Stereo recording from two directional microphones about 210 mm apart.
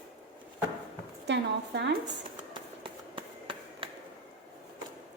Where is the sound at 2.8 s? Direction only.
25° right (ahead or behind).